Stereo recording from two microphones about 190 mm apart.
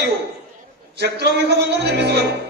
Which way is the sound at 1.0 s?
60° right (ahead or behind).